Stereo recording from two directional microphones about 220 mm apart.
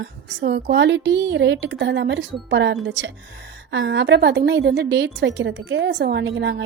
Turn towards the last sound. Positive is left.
turn(degrees=-55)  # may be behind; listen again after turning